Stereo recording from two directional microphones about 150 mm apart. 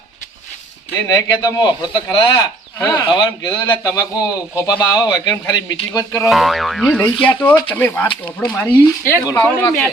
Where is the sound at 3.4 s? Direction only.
30° left (ahead or behind).